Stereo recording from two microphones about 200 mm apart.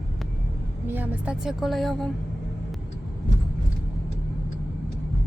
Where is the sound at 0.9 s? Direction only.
10° right (ahead or behind).